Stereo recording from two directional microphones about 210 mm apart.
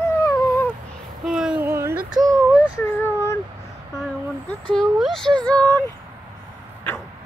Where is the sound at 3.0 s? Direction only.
15° left (ahead or behind).